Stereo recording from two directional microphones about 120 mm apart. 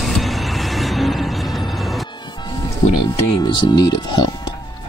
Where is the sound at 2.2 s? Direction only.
40° left (ahead or behind).